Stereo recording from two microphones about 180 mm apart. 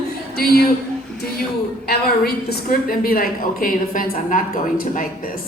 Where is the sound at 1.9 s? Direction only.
60° left (ahead or behind).